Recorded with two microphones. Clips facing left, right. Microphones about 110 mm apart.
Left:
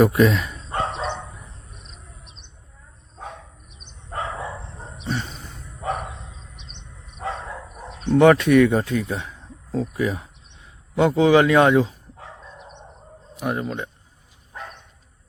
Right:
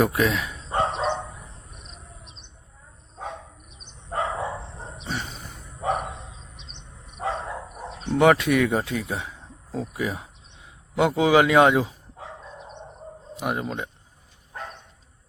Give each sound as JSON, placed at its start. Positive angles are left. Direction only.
{"t": 0.0, "sound": "speech", "side_deg": 0}
{"t": 1.2, "sound": "cricket", "side_deg": -5}
{"t": 4.1, "sound": "dog", "side_deg": -20}
{"t": 5.0, "sound": "a sound", "side_deg": 0}
{"t": 5.8, "sound": "bow-wow", "side_deg": -15}
{"t": 7.3, "sound": "dog", "side_deg": -15}
{"t": 7.9, "sound": "a man's voice", "side_deg": 0}
{"t": 13.4, "sound": "speech", "side_deg": -10}